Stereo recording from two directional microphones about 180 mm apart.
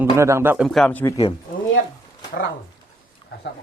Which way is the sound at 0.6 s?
5° left (ahead or behind).